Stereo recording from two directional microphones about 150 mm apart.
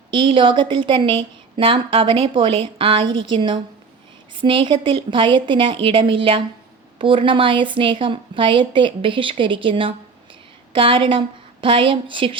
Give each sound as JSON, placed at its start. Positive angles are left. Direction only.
{"t": 0.1, "sound": "a woman's voice", "side_deg": -35}